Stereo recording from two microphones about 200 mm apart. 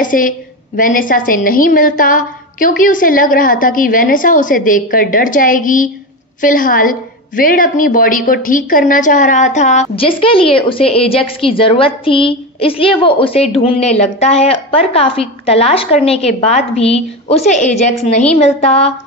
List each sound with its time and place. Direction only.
0.0 s a woman's voice: 40° left (ahead or behind)